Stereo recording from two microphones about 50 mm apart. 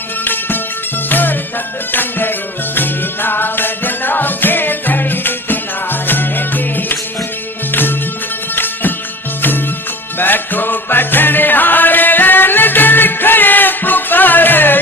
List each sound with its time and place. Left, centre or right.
0.3 s music: left
10.2 s music: left